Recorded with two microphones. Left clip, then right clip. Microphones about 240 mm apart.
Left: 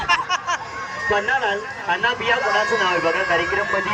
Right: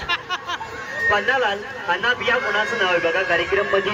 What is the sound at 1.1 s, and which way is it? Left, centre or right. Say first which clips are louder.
Speech: even; right.